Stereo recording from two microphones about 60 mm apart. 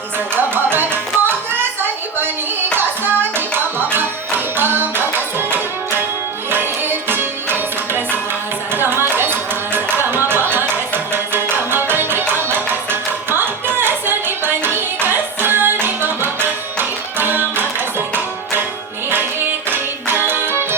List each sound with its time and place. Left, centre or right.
0.3 s music: right
19.7 s music: right